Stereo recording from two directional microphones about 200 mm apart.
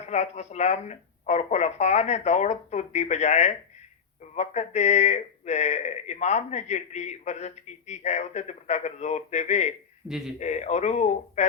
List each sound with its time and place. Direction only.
0.1 s a man's voice: 35° left (ahead or behind)
10.1 s speech: centre (ahead or behind)
10.4 s a man's voice: 35° left (ahead or behind)